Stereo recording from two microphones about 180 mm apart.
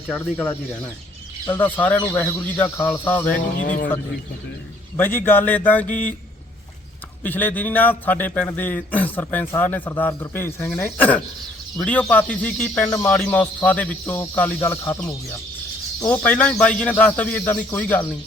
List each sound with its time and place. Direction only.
1.5 s a man's voice: 10° left (ahead or behind)
3.6 s speech: 45° left (ahead or behind)
4.9 s a man's voice: 10° left (ahead or behind)
7.2 s a man's voice: 10° left (ahead or behind)
16.0 s a man's voice: 10° left (ahead or behind)